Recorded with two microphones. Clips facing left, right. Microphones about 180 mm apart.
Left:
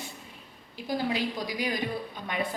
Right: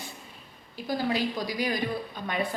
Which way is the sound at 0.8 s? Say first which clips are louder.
Right 1 dB; 15° left (ahead or behind).